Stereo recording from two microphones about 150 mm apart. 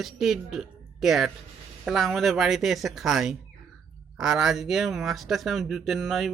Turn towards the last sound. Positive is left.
turn(degrees=0)  # may be behind; listen again after turning